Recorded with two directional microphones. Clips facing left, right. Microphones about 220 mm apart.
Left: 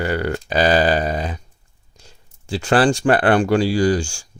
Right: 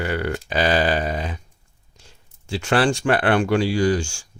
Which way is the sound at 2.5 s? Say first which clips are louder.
Left 3 dB; 35° left (ahead or behind).